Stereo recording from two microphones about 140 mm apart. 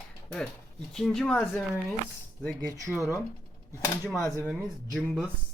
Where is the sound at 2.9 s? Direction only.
20° left (ahead or behind).